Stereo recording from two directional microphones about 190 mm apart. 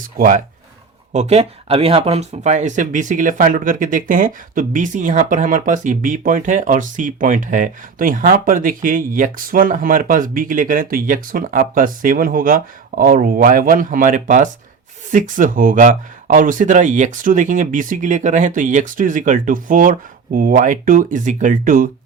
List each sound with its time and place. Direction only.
0.0 s speech: 45° right (ahead or behind)